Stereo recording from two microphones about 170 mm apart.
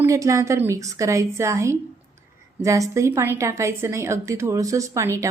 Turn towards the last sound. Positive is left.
turn(degrees=-20)  # may be behind; listen again after turning